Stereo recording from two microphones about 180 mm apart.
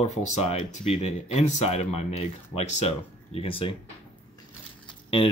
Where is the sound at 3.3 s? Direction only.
30° left (ahead or behind).